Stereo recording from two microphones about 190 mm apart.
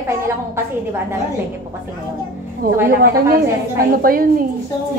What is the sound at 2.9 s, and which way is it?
A woman's voice, 50° right (ahead or behind).